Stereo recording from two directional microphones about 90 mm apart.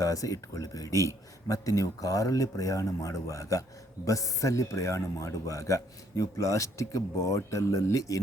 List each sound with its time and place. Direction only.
0.0 s speech: 40° left (ahead or behind)